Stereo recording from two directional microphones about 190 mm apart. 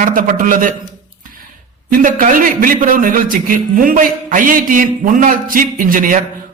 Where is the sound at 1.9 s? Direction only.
45° right (ahead or behind).